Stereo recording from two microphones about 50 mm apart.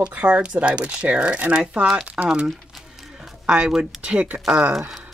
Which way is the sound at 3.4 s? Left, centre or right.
Centre.